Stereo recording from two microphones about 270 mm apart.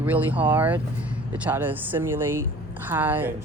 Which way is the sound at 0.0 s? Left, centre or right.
Centre.